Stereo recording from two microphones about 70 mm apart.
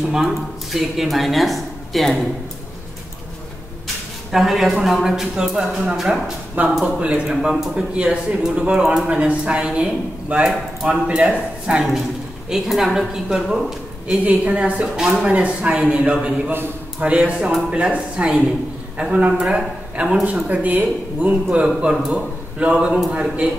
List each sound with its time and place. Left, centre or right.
0.1 s speech: centre
3.8 s a sound: centre
4.8 s a man's voice: centre
7.0 s a man's voice: centre
14.2 s a man's voice: centre
21.6 s a man's voice: centre